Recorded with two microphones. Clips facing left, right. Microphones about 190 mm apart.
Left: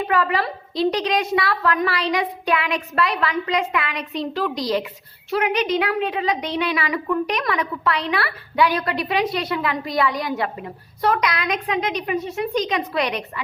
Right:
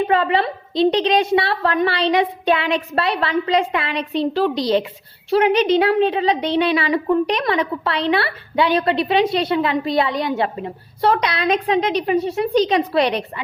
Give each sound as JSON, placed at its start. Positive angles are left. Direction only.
{"t": 0.1, "sound": "a woman's voice", "side_deg": -25}